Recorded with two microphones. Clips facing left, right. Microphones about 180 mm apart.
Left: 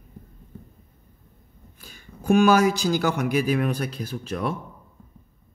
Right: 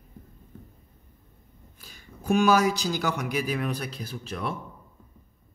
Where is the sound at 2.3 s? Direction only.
55° left (ahead or behind).